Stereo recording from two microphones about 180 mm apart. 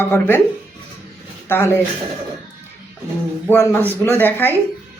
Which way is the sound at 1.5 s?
10° left (ahead or behind).